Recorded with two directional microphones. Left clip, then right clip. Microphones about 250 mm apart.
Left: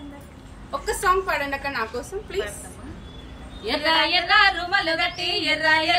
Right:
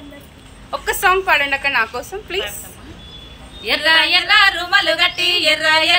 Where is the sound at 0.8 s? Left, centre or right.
Centre.